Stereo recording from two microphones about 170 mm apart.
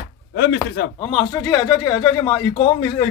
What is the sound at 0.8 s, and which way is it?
Speech, 65° left (ahead or behind).